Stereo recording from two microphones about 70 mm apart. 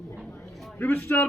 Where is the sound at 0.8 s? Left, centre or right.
Left.